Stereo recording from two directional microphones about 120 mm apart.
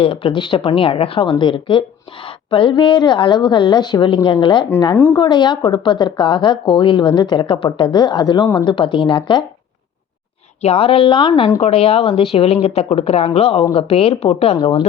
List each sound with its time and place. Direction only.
0.0 s a woman's voice: 50° left (ahead or behind)
10.6 s a woman's voice: 55° left (ahead or behind)
11.6 s speech: 55° left (ahead or behind)